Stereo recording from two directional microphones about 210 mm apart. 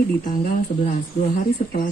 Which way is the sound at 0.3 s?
40° left (ahead or behind).